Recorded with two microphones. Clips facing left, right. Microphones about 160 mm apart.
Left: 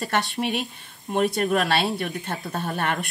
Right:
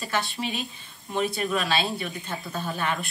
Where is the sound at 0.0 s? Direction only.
65° left (ahead or behind).